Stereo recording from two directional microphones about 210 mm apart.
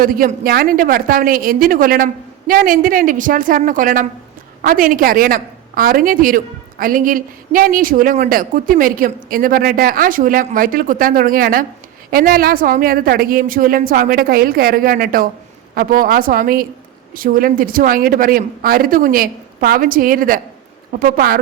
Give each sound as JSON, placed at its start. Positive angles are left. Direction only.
{"t": 0.0, "sound": "a woman's voice", "side_deg": -45}